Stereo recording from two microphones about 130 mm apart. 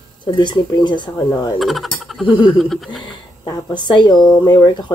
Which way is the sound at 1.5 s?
Centre (ahead or behind).